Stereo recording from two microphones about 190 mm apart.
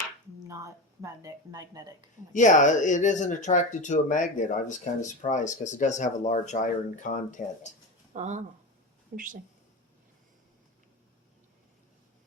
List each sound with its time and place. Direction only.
0.4 s speech: 15° right (ahead or behind)
2.3 s speech: 40° left (ahead or behind)
8.1 s a woman's voice: 40° right (ahead or behind)